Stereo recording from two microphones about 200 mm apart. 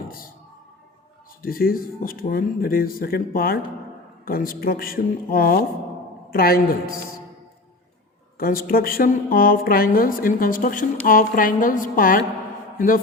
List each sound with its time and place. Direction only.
1.4 s a woman's voice: 45° left (ahead or behind)
8.4 s a woman's voice: 45° left (ahead or behind)